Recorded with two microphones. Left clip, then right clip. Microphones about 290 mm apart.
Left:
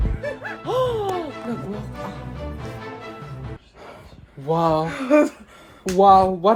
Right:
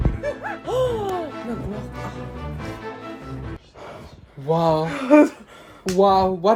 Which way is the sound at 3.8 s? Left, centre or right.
Right.